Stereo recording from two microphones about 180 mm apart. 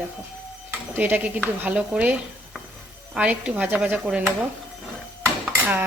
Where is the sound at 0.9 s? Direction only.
10° right (ahead or behind).